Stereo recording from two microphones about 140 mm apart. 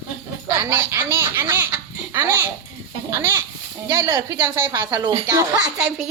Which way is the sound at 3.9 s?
25° right (ahead or behind).